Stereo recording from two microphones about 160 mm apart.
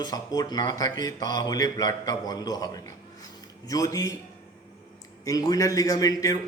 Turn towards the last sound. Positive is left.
turn(degrees=25)  # may be behind; listen again after turning